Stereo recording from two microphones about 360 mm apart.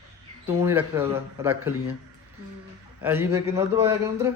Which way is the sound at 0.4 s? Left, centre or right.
Centre.